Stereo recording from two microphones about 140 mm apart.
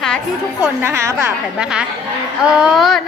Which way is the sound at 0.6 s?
15° right (ahead or behind).